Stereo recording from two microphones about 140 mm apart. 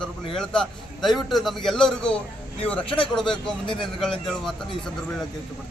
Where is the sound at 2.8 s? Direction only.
40° left (ahead or behind).